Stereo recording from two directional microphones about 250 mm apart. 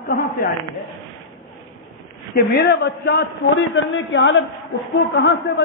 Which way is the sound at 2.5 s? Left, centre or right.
Left.